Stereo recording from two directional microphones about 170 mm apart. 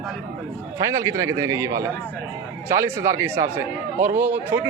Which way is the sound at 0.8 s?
20° right (ahead or behind).